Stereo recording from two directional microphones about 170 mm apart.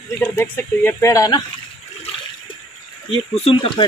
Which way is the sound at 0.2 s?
10° left (ahead or behind).